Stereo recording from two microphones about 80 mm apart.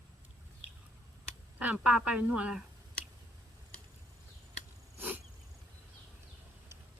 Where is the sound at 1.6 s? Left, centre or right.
Centre.